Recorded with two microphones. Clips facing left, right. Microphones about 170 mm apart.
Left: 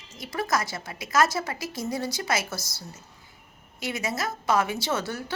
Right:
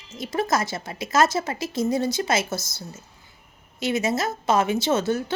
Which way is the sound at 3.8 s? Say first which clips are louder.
Right 6 dB; 25° right (ahead or behind).